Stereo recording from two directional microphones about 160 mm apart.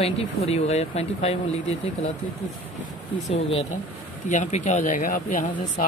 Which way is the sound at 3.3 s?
40° left (ahead or behind).